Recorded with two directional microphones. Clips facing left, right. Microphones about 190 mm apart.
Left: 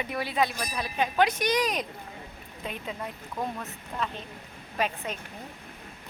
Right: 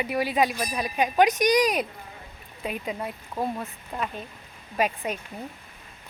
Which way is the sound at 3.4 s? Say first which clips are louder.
Right 4 dB; 35° right (ahead or behind).